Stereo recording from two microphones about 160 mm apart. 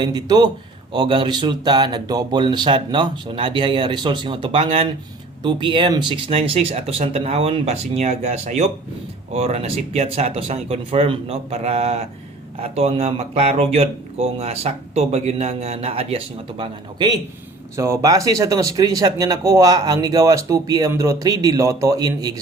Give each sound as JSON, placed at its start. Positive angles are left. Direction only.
{"t": 0.0, "sound": "speech", "side_deg": -25}
{"t": 17.7, "sound": "speech", "side_deg": -20}